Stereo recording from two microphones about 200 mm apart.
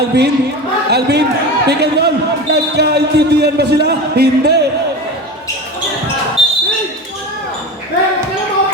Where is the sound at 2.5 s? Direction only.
55° right (ahead or behind).